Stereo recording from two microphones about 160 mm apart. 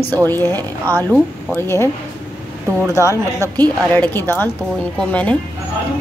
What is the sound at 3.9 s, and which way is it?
A woman's voice, 10° left (ahead or behind).